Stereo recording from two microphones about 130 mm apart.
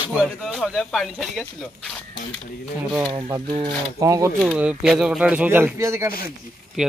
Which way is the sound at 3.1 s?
40° right (ahead or behind).